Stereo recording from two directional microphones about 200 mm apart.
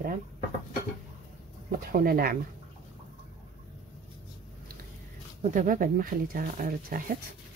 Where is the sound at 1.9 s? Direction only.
45° right (ahead or behind).